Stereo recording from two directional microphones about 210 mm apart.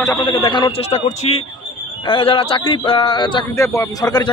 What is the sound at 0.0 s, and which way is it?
A man's voice, 20° left (ahead or behind).